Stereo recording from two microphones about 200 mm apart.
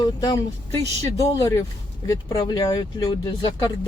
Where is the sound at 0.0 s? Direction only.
20° left (ahead or behind).